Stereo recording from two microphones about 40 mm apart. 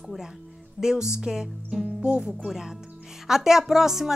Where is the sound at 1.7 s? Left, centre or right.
Centre.